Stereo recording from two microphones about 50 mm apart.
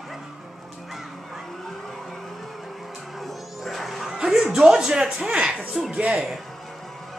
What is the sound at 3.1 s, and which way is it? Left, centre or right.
Music, centre.